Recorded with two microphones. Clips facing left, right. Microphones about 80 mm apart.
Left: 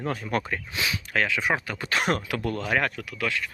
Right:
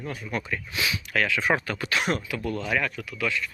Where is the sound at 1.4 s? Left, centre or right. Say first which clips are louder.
Right 2 dB; centre.